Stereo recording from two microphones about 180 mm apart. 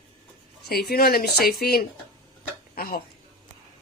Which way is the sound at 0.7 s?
60° left (ahead or behind).